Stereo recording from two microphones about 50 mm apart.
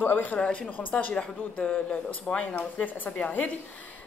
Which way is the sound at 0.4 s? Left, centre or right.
Centre.